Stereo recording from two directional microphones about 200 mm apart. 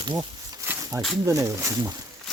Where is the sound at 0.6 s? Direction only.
15° right (ahead or behind).